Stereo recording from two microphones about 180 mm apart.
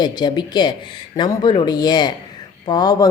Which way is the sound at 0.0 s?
25° left (ahead or behind).